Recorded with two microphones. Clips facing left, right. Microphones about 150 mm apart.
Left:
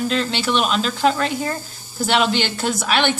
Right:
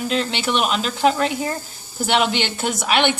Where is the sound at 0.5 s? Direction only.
5° right (ahead or behind).